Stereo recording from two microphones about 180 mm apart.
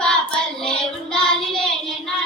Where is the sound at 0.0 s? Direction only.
5° left (ahead or behind).